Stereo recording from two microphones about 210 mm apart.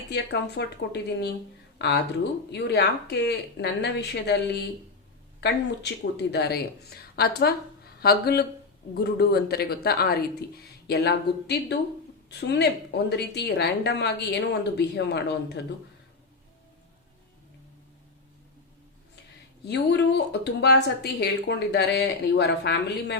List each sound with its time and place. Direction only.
0.1 s speech: 55° left (ahead or behind)
5.4 s speech: 55° left (ahead or behind)
19.6 s speech: 55° left (ahead or behind)